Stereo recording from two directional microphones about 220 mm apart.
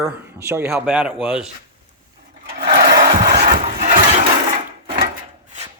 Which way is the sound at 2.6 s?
45° right (ahead or behind).